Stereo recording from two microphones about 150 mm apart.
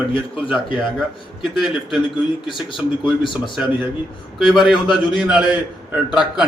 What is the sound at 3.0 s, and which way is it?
Speech, 30° left (ahead or behind).